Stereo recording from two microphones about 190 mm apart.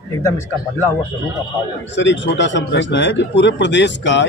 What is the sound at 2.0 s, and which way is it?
Speech, 70° left (ahead or behind).